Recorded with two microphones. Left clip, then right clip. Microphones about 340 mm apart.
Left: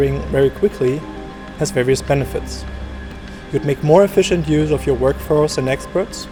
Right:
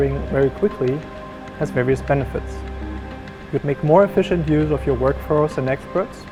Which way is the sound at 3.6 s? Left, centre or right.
Right.